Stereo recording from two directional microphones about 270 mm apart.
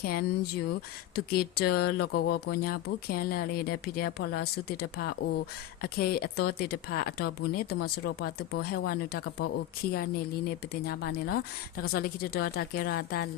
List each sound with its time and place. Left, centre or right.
0.0 s speech: left
10.8 s speech: left